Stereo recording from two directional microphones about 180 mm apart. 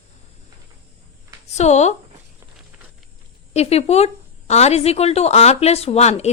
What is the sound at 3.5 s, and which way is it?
Speech, 35° left (ahead or behind).